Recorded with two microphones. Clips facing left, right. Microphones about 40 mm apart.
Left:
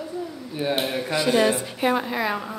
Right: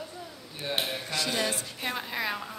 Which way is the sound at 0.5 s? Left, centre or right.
Centre.